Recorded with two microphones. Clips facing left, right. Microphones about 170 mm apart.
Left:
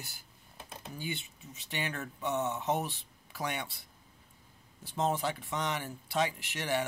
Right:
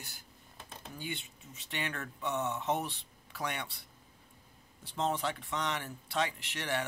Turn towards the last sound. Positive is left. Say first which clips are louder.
# left 3 dB
turn(degrees=10)  # may be behind; listen again after turning